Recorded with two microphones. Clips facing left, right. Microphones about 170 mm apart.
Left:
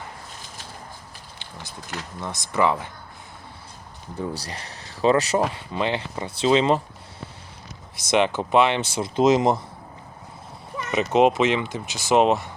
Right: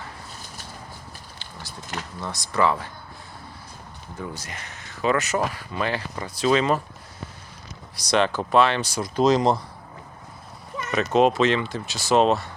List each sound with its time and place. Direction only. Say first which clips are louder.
2.2 s speech: left 1 dB; 20° left (ahead or behind)
4.4 s speech: left 3 dB; 35° left (ahead or behind)
8.1 s speech: left 1 dB; 20° left (ahead or behind)
10.9 s speech: left 1 dB; 20° left (ahead or behind)